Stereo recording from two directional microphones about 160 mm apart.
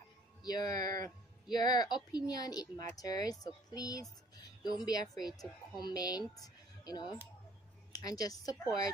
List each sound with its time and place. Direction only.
0.4 s a woman's voice: 25° left (ahead or behind)